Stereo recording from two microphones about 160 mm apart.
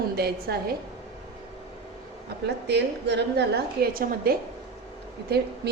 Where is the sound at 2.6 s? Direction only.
90° right; by 4.3 s 65° right (ahead or behind).